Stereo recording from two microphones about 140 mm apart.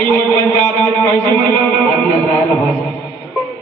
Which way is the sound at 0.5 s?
20° left (ahead or behind).